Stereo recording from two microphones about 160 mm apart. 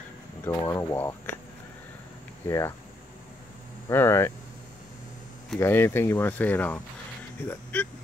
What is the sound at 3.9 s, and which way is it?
Speech, 15° left (ahead or behind).